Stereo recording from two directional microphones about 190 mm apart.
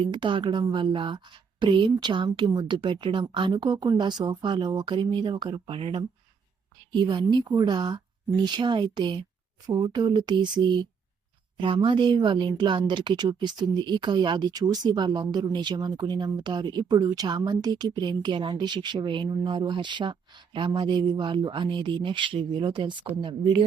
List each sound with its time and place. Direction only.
0.0 s a woman's voice: 25° right (ahead or behind)